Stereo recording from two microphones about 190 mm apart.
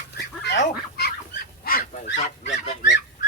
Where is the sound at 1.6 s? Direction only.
55° left (ahead or behind).